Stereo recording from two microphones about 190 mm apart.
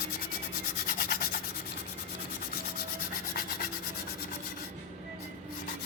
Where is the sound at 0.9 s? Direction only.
50° left (ahead or behind).